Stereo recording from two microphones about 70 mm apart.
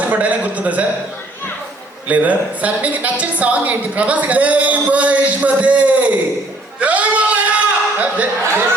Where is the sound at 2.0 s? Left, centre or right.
Right.